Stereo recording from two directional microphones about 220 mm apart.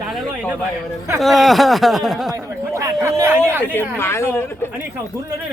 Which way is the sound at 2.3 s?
15° right (ahead or behind).